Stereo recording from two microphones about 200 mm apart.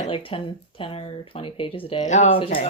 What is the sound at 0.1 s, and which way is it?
A woman's voice, 25° left (ahead or behind).